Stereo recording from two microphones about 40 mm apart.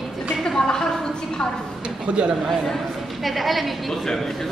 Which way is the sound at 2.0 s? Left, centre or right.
Right.